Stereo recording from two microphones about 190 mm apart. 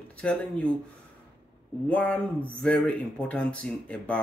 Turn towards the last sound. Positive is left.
turn(degrees=5)  # may be behind; listen again after turning